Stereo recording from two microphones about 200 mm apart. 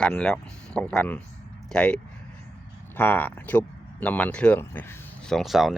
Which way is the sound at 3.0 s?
10° left (ahead or behind).